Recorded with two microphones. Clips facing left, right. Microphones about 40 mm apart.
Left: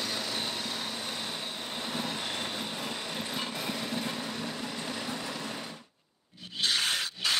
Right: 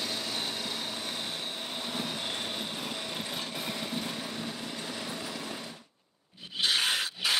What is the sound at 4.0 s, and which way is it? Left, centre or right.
Vehicle, centre.